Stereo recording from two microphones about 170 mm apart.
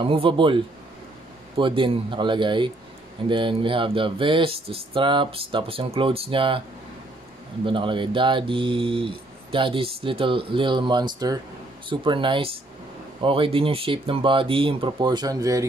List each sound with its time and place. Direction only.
0.0 s speech: 30° right (ahead or behind)
1.6 s speech: 30° right (ahead or behind)
7.6 s speech: 30° right (ahead or behind)